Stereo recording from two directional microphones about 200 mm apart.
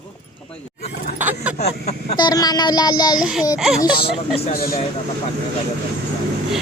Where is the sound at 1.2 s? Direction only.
10° right (ahead or behind).